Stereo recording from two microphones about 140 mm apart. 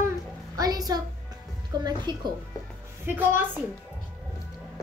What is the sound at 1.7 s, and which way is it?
Speech, 30° right (ahead or behind).